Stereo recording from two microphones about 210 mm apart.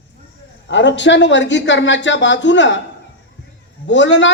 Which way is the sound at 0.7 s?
60° left (ahead or behind).